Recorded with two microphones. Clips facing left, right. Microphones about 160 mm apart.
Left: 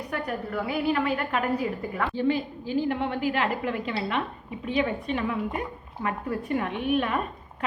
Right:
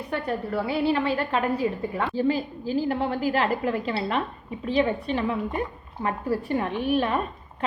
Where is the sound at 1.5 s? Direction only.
20° right (ahead or behind).